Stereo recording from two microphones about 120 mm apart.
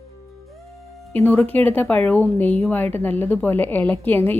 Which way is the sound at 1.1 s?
15° left (ahead or behind).